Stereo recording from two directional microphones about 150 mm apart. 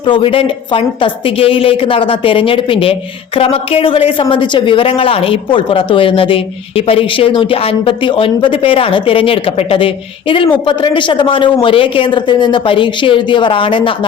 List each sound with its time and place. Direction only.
0.0 s a woman's voice: 35° left (ahead or behind)